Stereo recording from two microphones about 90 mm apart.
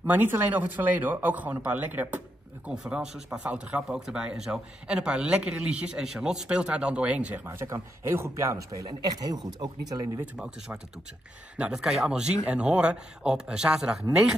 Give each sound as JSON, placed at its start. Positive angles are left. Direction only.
{"t": 0.0, "sound": "speech", "side_deg": -20}
{"t": 7.4, "sound": "speech", "side_deg": -30}
{"t": 10.2, "sound": "speech", "side_deg": -15}